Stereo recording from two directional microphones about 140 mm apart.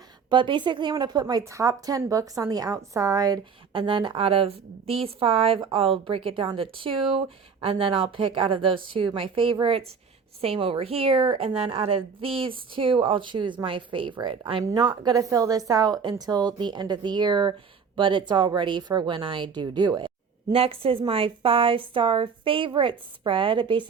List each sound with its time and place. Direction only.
0.3 s a woman's voice: 35° right (ahead or behind)